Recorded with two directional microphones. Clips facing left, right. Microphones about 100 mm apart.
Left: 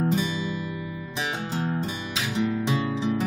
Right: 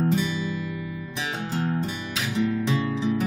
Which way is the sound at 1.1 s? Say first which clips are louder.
Left 1 dB; 25° left (ahead or behind).